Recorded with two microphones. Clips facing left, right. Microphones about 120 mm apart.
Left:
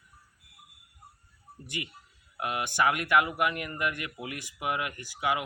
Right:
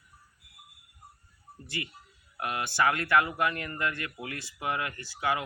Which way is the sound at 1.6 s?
15° left (ahead or behind).